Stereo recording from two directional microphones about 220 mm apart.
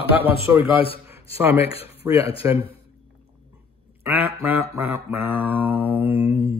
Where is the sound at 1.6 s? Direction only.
25° left (ahead or behind).